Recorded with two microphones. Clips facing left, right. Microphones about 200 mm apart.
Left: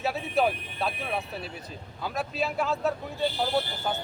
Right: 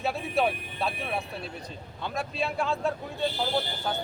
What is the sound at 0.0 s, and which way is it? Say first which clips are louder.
Speech: left 1 dB; centre (ahead or behind).